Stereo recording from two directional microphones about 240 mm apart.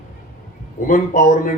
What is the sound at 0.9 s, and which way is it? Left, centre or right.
Speech, left.